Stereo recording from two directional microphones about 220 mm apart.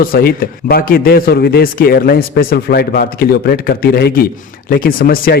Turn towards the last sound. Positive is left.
turn(degrees=40)  # may be behind; listen again after turning